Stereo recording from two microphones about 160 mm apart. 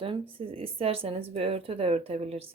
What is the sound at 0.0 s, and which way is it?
Speech, 35° right (ahead or behind).